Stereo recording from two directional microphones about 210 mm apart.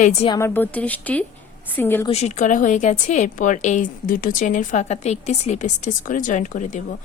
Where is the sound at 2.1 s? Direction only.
30° left (ahead or behind).